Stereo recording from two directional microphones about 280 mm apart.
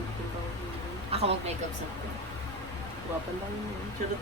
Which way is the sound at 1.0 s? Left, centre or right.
Right.